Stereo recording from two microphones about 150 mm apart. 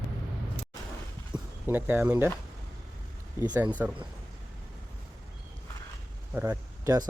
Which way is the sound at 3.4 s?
20° right (ahead or behind).